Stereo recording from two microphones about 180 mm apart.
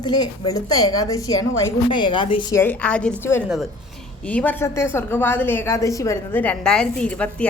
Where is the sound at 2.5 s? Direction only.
10° left (ahead or behind).